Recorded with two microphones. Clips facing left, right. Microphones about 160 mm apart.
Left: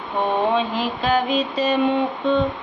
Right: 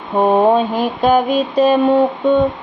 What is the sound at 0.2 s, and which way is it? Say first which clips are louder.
A woman's voice: right 8 dB; 45° right (ahead or behind).